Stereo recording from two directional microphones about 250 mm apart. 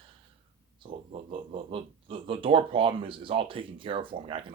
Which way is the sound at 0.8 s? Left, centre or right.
Right.